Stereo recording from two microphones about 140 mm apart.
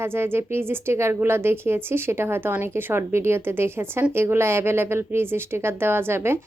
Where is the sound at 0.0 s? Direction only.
15° right (ahead or behind).